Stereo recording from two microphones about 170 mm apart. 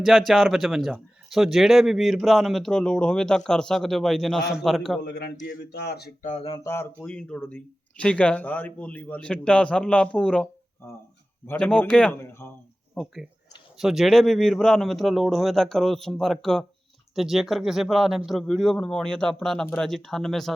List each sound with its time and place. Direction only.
0.0 s a man's voice: centre (ahead or behind)
5.0 s a man's voice: 85° left
6.2 s speech: 40° left (ahead or behind)
6.6 s speech: 15° left (ahead or behind)
7.0 s a man's voice: 5° left (ahead or behind)
13.7 s a man's voice: centre (ahead or behind)